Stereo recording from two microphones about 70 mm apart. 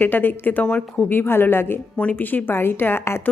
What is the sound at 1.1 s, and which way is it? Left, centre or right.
Speech, left.